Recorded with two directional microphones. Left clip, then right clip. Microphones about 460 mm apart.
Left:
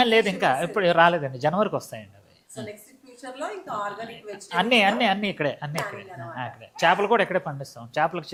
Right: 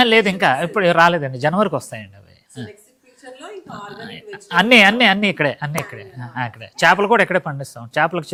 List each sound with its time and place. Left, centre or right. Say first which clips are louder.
0.0 s a woman's voice: right 6 dB; right
4.0 s a woman's voice: right 3 dB; right